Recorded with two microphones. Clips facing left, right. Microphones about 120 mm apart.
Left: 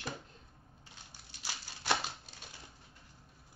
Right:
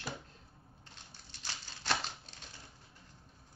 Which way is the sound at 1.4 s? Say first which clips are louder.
Left 1 dB; 10° left (ahead or behind).